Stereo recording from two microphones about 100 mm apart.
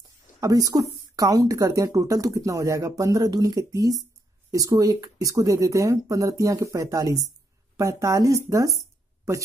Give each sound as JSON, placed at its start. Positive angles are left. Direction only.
{"t": 0.4, "sound": "a woman's voice", "side_deg": -35}